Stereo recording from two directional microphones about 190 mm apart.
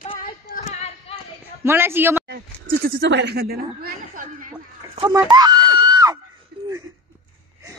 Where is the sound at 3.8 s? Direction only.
45° right (ahead or behind).